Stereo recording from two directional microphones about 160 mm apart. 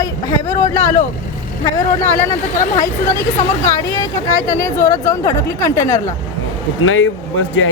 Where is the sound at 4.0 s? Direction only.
20° left (ahead or behind).